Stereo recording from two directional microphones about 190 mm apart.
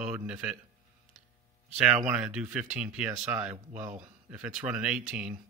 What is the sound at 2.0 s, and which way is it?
Speech, 5° right (ahead or behind).